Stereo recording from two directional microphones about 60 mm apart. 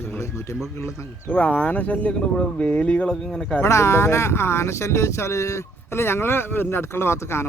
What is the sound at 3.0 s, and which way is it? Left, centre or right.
Speech, centre.